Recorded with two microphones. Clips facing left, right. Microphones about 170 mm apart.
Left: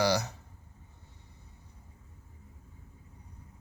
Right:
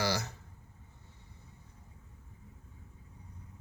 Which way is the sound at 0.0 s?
15° left (ahead or behind).